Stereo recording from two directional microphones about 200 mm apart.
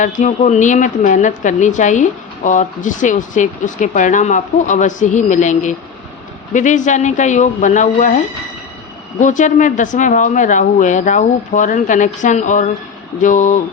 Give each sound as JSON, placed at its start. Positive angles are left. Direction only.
{"t": 0.0, "sound": "a woman's voice", "side_deg": 40}
{"t": 9.2, "sound": "a woman's voice", "side_deg": 40}